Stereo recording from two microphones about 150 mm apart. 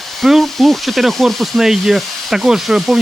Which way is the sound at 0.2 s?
Centre (ahead or behind).